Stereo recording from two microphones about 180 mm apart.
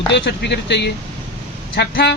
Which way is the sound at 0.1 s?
70° left (ahead or behind).